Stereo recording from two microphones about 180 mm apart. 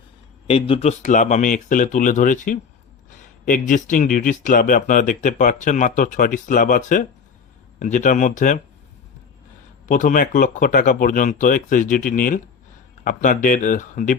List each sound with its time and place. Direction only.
0.4 s speech: 30° left (ahead or behind)
9.8 s speech: 45° left (ahead or behind)